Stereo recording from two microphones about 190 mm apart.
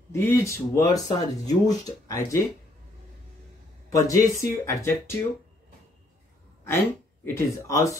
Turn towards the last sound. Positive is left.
turn(degrees=15)  # may be behind; listen again after turning